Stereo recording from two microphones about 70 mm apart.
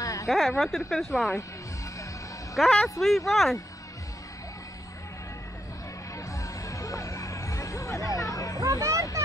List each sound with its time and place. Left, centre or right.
0.0 s a sound: left
0.3 s a woman's voice: centre
2.5 s a woman's voice: centre
6.1 s music: left
8.5 s hubbub: right